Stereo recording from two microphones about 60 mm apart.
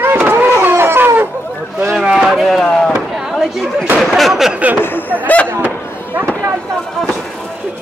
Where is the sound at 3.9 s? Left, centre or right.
Centre.